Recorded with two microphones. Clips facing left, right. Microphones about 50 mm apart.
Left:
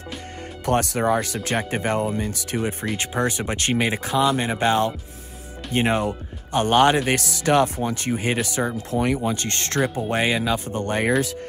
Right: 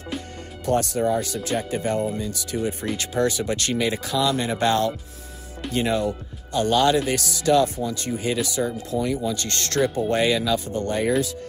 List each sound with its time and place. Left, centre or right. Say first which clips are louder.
0.7 s speech: left 1 dB; left
3.0 s speech: right 2 dB; left
8.9 s speech: left 3 dB; left
9.3 s speech: left 1 dB; left